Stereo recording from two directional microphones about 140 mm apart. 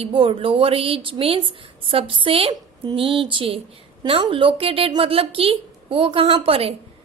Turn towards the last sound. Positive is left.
turn(degrees=-45)  # may be behind; listen again after turning